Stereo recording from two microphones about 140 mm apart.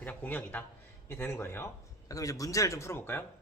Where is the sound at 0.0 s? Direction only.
10° left (ahead or behind).